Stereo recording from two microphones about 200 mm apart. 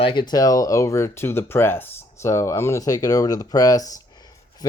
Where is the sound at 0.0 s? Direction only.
25° left (ahead or behind).